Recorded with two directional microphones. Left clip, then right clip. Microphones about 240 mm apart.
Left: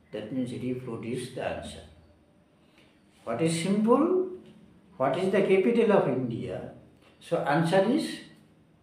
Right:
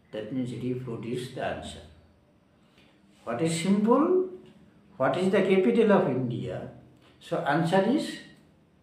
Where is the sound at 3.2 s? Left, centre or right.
Centre.